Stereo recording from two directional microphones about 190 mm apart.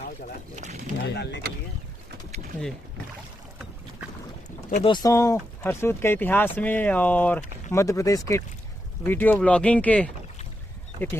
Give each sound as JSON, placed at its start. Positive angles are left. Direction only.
{"t": 0.5, "sound": "speech", "side_deg": -40}
{"t": 1.0, "sound": "speech", "side_deg": 65}
{"t": 4.8, "sound": "speech", "side_deg": 20}